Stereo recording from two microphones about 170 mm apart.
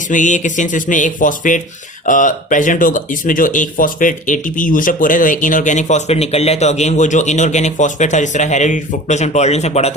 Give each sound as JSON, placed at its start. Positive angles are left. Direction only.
{"t": 0.1, "sound": "speech", "side_deg": 45}